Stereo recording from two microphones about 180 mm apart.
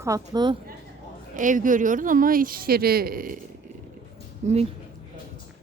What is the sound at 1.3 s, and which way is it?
Speech, 45° right (ahead or behind).